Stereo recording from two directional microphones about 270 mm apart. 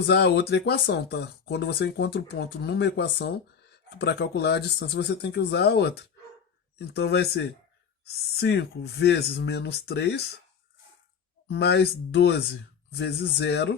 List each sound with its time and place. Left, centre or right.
0.1 s speech: left
11.4 s speech: left